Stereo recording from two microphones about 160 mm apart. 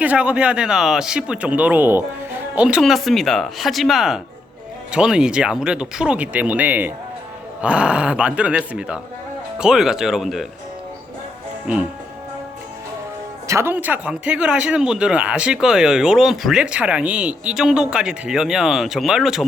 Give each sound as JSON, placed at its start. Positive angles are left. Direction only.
{"t": 0.0, "sound": "speech", "side_deg": -10}
{"t": 11.6, "sound": "speech", "side_deg": -10}
{"t": 13.5, "sound": "speech", "side_deg": -15}